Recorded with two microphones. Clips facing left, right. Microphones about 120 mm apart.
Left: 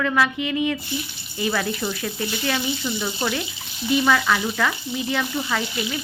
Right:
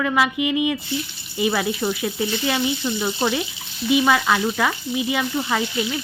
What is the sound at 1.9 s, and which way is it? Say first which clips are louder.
A woman's voice: right 4 dB; 10° right (ahead or behind).